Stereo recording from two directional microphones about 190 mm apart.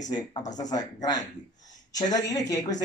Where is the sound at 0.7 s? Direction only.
20° left (ahead or behind).